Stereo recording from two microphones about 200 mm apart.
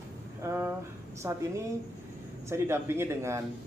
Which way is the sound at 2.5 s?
10° right (ahead or behind).